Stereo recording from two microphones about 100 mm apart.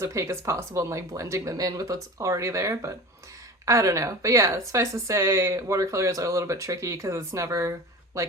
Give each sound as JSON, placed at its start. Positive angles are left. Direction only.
{"t": 0.0, "sound": "a woman's voice", "side_deg": -30}